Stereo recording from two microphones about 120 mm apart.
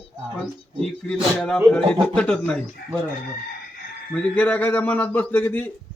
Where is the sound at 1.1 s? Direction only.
10° left (ahead or behind).